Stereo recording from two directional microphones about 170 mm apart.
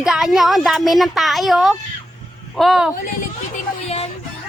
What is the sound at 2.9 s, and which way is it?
Speech, 50° left (ahead or behind).